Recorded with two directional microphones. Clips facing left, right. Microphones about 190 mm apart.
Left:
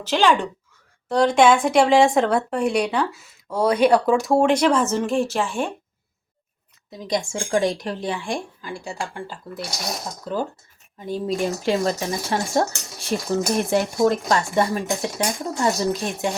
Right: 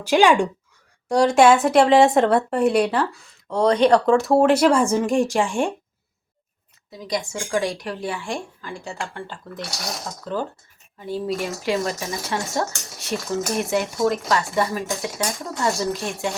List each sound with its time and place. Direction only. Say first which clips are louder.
0.0 s a woman's voice: right 3 dB; 15° right (ahead or behind)
7.0 s speech: left 2 dB; 25° left (ahead or behind)
11.0 s speech: left 1 dB; 20° left (ahead or behind)
11.4 s speech: left 3 dB; 30° left (ahead or behind)